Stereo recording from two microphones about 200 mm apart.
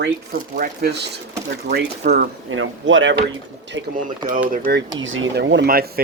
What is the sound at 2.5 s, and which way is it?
Speech, 75° right (ahead or behind).